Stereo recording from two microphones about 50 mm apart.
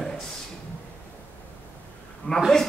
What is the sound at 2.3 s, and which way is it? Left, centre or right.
Speech, left.